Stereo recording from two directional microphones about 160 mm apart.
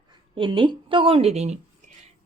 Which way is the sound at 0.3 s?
30° right (ahead or behind).